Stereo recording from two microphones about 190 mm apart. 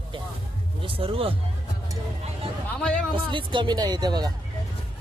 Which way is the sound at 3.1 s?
25° right (ahead or behind).